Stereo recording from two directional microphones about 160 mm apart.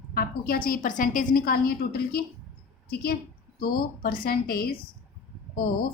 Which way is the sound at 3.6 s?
70° left (ahead or behind).